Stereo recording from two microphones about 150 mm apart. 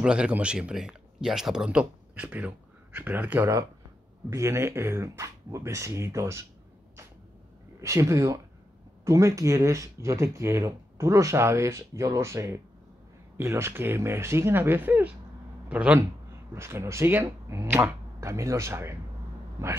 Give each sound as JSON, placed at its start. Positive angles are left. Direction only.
{"t": 0.0, "sound": "speech", "side_deg": -5}
{"t": 7.8, "sound": "speech", "side_deg": -20}